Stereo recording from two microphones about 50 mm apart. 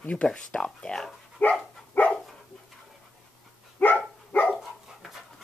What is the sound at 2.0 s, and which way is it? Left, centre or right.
Dog, left.